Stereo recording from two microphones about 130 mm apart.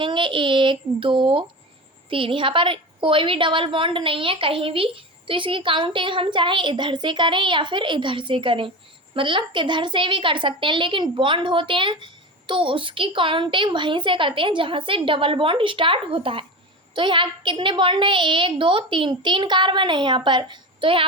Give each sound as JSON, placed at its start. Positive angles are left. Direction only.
{"t": 0.0, "sound": "a woman's voice", "side_deg": -40}